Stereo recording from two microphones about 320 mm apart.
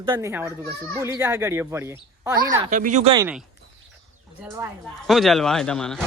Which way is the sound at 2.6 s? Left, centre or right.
Right.